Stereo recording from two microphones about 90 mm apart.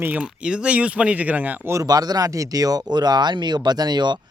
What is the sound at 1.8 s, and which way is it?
Speech, 50° right (ahead or behind).